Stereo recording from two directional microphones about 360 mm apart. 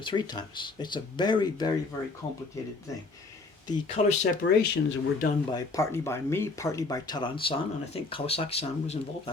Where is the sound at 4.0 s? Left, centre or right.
Left.